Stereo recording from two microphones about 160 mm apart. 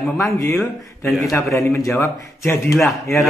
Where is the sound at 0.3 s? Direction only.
20° left (ahead or behind).